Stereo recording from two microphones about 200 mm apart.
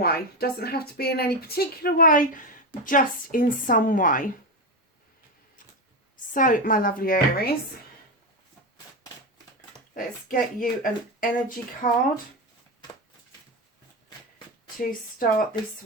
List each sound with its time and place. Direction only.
0.0 s speech: 50° left (ahead or behind)
6.3 s speech: 40° left (ahead or behind)
9.9 s speech: 45° left (ahead or behind)
14.8 s speech: 45° left (ahead or behind)